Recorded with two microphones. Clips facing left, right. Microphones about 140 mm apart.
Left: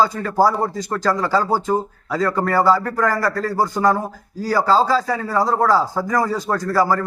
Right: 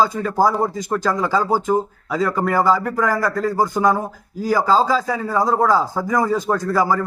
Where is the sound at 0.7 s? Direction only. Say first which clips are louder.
Even; 15° right (ahead or behind).